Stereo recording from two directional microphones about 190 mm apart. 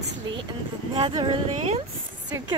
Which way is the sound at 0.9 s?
25° right (ahead or behind).